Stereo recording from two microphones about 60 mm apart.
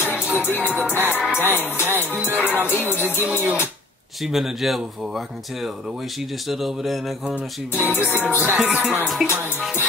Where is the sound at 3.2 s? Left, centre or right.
Right.